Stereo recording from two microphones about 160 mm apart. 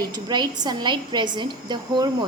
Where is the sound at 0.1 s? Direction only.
25° right (ahead or behind).